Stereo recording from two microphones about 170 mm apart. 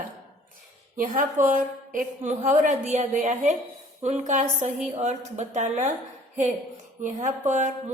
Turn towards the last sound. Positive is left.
turn(degrees=-45)  # may be behind; listen again after turning